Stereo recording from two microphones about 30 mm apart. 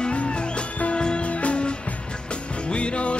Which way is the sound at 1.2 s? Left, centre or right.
Left.